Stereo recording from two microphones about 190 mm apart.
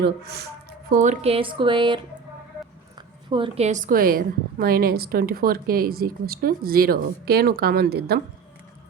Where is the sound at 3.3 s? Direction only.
30° right (ahead or behind); by 8.1 s 55° right (ahead or behind).